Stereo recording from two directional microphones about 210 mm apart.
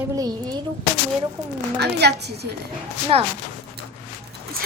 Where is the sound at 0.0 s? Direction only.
20° right (ahead or behind).